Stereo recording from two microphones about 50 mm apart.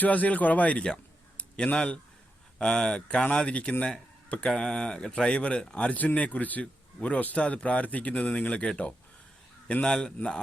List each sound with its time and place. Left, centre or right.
0.0 s speech: left
5.9 s speech: left; by 10.1 s centre